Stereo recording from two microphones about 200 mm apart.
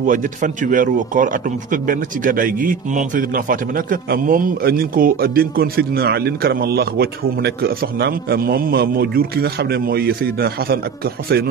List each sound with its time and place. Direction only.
0.0 s a man's voice: 40° right (ahead or behind)